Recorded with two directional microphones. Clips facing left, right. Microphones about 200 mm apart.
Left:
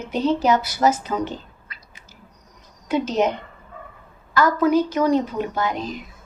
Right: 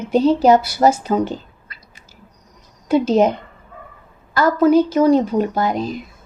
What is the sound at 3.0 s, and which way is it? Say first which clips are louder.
Speech: right 6 dB; 30° right (ahead or behind).